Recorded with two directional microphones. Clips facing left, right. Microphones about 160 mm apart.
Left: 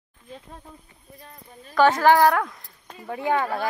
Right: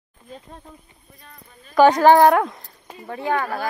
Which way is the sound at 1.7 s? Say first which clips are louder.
Right 4 dB; 15° right (ahead or behind).